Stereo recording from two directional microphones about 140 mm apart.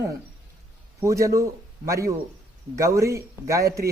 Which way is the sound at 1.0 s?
20° right (ahead or behind).